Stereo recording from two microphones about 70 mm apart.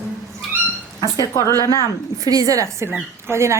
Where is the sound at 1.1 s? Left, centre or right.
Left.